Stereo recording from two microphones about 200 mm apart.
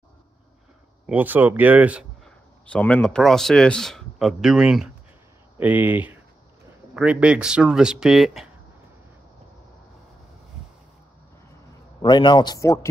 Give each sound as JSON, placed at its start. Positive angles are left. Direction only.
{"t": 1.0, "sound": "speech", "side_deg": -10}
{"t": 2.6, "sound": "a man's voice", "side_deg": 5}
{"t": 12.0, "sound": "a man's voice", "side_deg": 25}